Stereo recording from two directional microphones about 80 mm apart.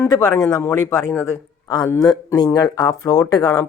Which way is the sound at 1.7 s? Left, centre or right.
Left.